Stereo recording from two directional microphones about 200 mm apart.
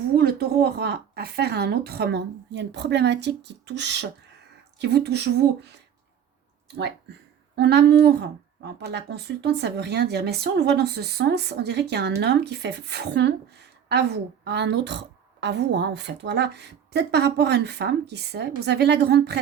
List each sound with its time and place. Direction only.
0.2 s speech: 50° right (ahead or behind)
7.5 s speech: 55° right (ahead or behind)